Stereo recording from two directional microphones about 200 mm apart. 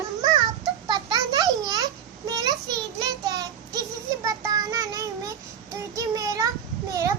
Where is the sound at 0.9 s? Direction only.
20° right (ahead or behind).